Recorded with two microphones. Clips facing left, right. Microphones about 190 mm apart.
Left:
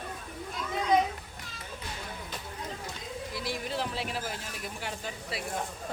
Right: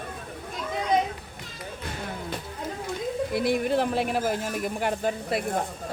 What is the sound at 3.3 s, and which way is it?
Speech, 55° right (ahead or behind).